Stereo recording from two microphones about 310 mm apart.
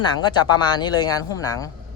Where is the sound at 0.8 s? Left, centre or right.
Centre.